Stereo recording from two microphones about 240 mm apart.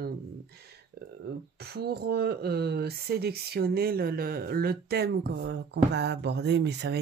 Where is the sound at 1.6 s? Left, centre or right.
Right.